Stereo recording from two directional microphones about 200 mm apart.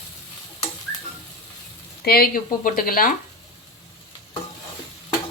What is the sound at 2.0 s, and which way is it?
Speech, 50° left (ahead or behind).